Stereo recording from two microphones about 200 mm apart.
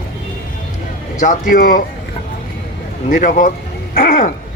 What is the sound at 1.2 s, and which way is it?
Speech, 40° left (ahead or behind).